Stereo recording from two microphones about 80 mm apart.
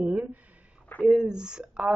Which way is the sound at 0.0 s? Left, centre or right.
Centre.